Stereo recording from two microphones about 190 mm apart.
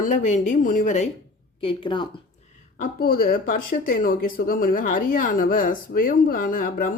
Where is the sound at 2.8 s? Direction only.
50° left (ahead or behind).